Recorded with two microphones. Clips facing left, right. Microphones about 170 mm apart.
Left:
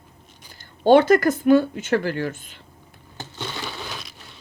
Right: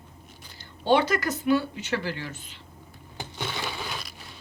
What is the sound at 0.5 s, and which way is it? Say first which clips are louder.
Speech: left 8 dB; 50° left (ahead or behind).